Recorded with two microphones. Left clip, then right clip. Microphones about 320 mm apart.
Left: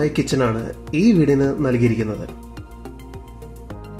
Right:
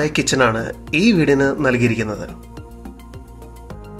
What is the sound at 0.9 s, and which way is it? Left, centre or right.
Speech, right.